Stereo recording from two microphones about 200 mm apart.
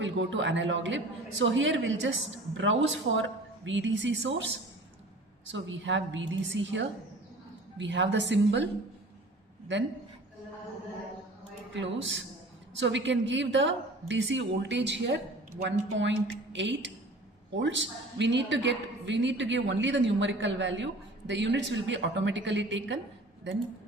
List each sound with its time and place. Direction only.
0.0 s a woman's voice: 65° right (ahead or behind)
11.7 s a man's voice: 65° right (ahead or behind)